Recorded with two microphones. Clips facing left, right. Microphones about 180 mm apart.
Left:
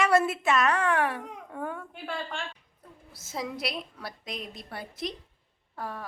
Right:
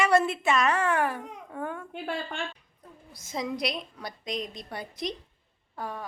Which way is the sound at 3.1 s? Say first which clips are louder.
Right 3 dB; 5° left (ahead or behind).